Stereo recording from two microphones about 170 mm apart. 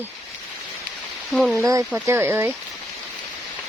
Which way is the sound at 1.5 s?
20° right (ahead or behind).